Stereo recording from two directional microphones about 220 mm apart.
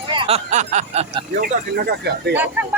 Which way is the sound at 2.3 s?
10° right (ahead or behind).